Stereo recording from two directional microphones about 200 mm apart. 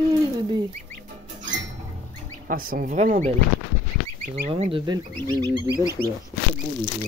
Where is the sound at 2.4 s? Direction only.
45° right (ahead or behind).